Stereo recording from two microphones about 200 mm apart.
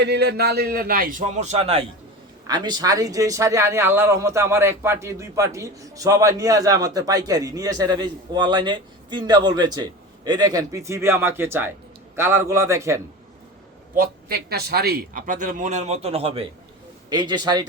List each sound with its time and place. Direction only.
0.0 s a man's voice: 55° right (ahead or behind); by 13.0 s 15° right (ahead or behind)
13.9 s a man's voice: 50° right (ahead or behind); by 17.7 s 20° right (ahead or behind)